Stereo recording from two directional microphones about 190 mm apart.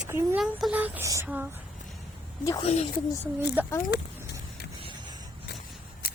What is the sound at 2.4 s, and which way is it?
Speech, 20° left (ahead or behind).